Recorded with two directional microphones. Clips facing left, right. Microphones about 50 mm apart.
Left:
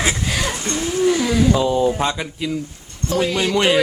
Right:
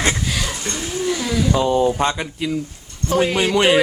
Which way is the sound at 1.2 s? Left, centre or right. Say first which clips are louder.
Left 3 dB; centre.